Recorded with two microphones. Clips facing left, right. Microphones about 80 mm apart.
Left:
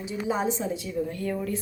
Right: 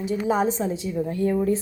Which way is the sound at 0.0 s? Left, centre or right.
Right.